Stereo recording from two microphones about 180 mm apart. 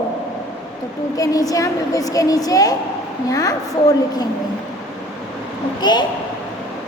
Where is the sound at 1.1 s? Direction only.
20° left (ahead or behind).